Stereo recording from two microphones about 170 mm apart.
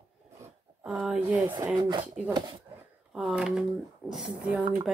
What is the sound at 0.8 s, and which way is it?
Speech, 5° right (ahead or behind).